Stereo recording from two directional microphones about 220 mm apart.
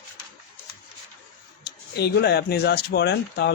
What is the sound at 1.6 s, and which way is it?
Speech, 45° left (ahead or behind).